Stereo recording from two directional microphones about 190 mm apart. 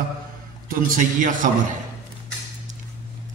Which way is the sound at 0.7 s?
45° right (ahead or behind).